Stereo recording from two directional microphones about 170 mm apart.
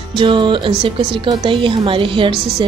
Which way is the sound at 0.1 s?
30° right (ahead or behind).